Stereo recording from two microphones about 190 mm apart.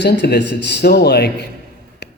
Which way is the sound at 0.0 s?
65° left (ahead or behind).